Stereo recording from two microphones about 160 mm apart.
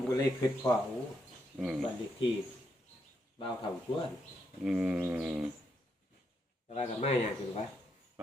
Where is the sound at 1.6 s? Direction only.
Centre (ahead or behind).